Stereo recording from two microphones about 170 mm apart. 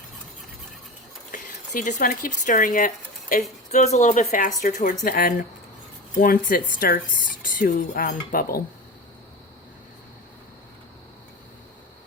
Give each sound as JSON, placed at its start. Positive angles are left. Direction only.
{"t": 1.3, "sound": "speech", "side_deg": 50}
{"t": 3.7, "sound": "speech", "side_deg": 40}